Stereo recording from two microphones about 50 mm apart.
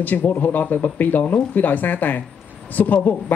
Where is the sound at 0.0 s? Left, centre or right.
Left.